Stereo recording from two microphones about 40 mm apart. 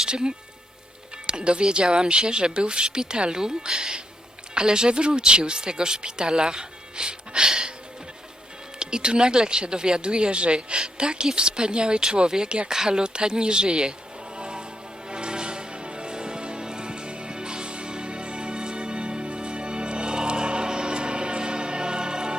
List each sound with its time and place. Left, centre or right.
0.0 s speech: right
8.8 s speech: right
14.3 s music: right